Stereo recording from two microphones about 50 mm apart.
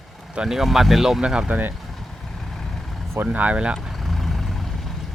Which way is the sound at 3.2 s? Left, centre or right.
Right.